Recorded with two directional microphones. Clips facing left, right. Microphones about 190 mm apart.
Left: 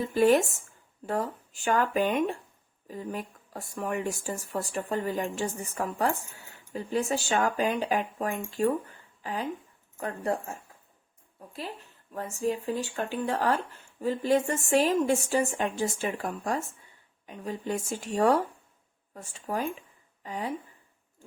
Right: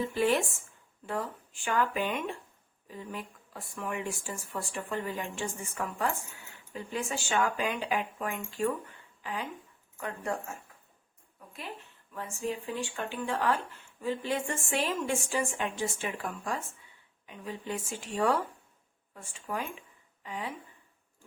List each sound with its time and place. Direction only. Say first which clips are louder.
0.1 s speech: left 6 dB; 40° left (ahead or behind)
11.5 s a woman's voice: left 4 dB; 35° left (ahead or behind)